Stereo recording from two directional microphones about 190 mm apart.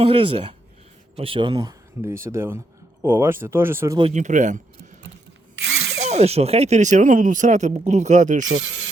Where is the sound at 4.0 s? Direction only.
35° right (ahead or behind).